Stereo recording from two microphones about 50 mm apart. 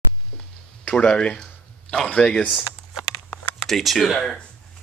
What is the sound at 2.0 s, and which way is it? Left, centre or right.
Speech, centre.